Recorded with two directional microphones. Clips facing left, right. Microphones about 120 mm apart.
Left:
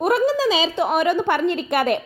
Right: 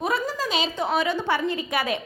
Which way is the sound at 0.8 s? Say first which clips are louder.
Left 4 dB; 50° left (ahead or behind).